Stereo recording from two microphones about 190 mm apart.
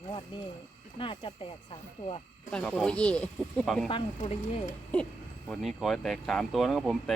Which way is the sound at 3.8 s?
30° left (ahead or behind).